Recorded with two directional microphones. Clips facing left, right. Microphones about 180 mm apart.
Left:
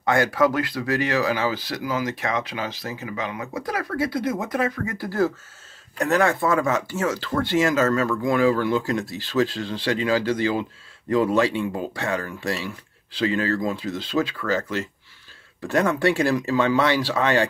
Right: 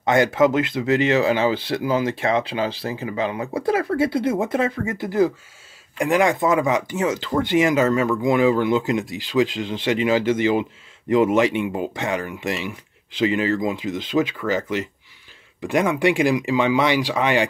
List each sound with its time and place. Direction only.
0.0 s speech: 20° right (ahead or behind)